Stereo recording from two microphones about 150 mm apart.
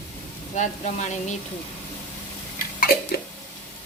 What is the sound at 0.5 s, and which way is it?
Speech, 55° left (ahead or behind).